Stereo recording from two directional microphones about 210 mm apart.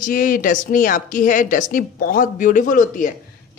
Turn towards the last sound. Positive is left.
turn(degrees=35)  # may be behind; listen again after turning